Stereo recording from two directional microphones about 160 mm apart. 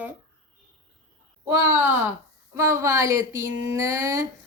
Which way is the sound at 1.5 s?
15° right (ahead or behind).